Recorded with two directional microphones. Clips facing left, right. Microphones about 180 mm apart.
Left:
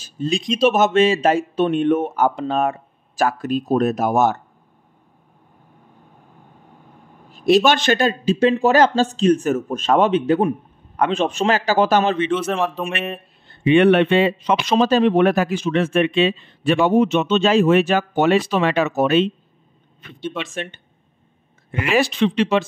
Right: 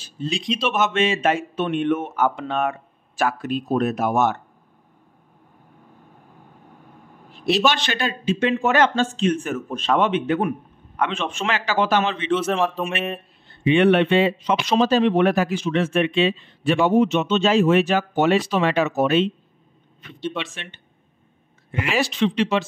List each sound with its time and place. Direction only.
0.0 s speech: 45° left (ahead or behind)
7.2 s speech: 45° left (ahead or behind)
12.3 s speech: centre (ahead or behind)
13.7 s a man's voice: 55° left (ahead or behind)
20.0 s speech: 55° left (ahead or behind)
21.7 s a man's voice: 55° left (ahead or behind)